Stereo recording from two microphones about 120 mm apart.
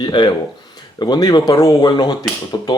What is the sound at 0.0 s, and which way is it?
Speech, 40° left (ahead or behind).